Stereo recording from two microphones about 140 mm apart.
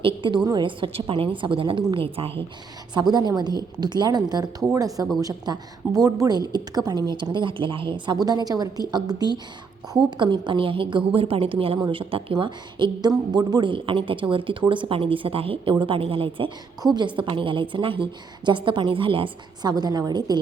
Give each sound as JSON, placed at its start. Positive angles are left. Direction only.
{"t": 0.0, "sound": "a woman's voice", "side_deg": -35}
{"t": 2.9, "sound": "a woman's voice", "side_deg": -30}